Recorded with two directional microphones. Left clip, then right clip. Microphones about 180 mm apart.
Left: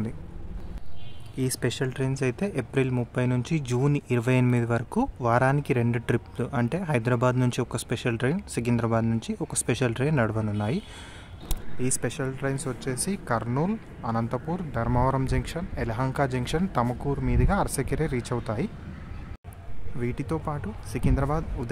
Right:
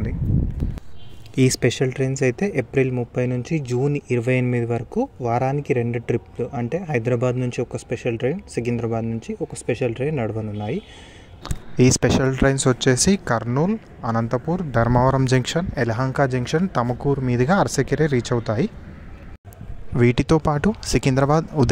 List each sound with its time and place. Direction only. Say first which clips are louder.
1.3 s speech: right 11 dB; 35° right (ahead or behind)
1.6 s speech: right 8 dB; 15° right (ahead or behind); by 10.8 s 5° left (ahead or behind)
11.8 s speech: right 12 dB; 50° right (ahead or behind)
13.5 s speech: right 6 dB; 25° right (ahead or behind)
15.0 s speech: right 5 dB; 35° right (ahead or behind)
16.1 s speech: right 6 dB; 25° right (ahead or behind)
20.0 s speech: right 13 dB; 45° right (ahead or behind)